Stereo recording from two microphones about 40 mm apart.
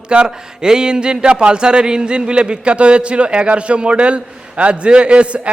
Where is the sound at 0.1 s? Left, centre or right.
Right.